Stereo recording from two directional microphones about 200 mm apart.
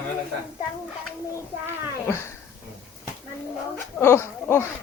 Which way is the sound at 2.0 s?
15° left (ahead or behind).